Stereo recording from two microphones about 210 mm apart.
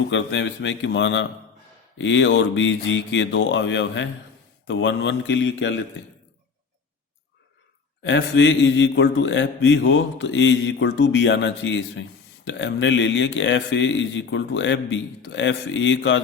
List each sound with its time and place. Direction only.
0.1 s speech: 60° left (ahead or behind)
8.0 s speech: 60° left (ahead or behind)